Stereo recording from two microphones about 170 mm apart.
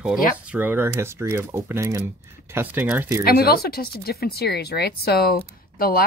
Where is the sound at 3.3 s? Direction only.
65° left (ahead or behind).